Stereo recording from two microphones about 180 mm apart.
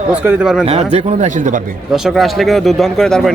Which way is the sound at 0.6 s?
35° right (ahead or behind).